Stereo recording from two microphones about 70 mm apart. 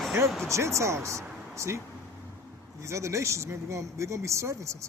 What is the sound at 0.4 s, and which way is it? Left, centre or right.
Speech, right.